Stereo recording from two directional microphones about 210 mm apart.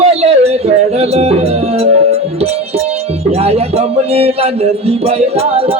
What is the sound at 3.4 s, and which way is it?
Speech, 30° right (ahead or behind).